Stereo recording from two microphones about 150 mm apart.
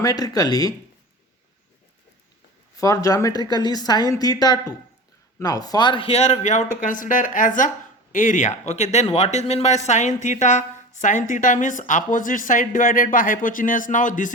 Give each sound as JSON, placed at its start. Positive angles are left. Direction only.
{"t": 0.0, "sound": "a woman's voice", "side_deg": 25}
{"t": 2.7, "sound": "a woman's voice", "side_deg": 20}
{"t": 6.8, "sound": "speech", "side_deg": 65}